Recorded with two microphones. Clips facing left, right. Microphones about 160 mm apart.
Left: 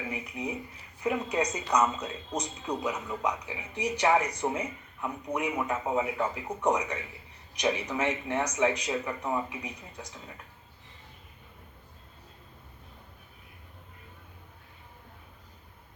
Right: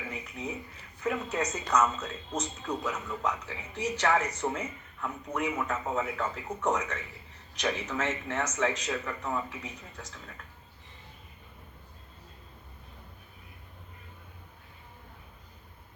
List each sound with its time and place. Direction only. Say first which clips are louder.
0.1 s speech: left 2 dB; 15° left (ahead or behind)